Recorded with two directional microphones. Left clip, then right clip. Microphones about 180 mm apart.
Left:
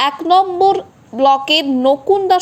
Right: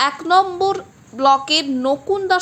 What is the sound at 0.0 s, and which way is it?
A woman's voice, 10° left (ahead or behind).